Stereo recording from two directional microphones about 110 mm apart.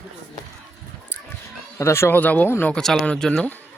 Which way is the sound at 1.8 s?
25° left (ahead or behind).